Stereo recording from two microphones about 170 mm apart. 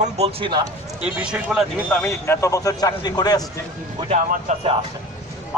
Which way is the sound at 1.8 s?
10° left (ahead or behind).